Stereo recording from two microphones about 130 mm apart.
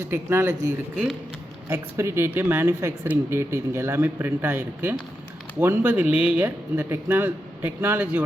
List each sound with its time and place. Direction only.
0.0 s speech: 20° right (ahead or behind)
1.7 s speech: 20° right (ahead or behind)